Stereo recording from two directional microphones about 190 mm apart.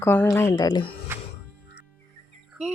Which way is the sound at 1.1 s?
10° right (ahead or behind).